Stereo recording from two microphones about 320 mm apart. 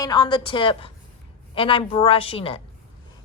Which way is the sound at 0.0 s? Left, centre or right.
Centre.